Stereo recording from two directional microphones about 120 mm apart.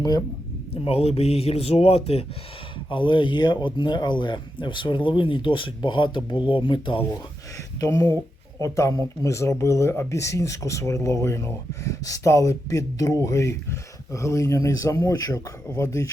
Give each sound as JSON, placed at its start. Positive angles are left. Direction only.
{"t": 0.7, "sound": "speech", "side_deg": 55}
{"t": 2.9, "sound": "speech", "side_deg": 40}
{"t": 7.8, "sound": "speech", "side_deg": 25}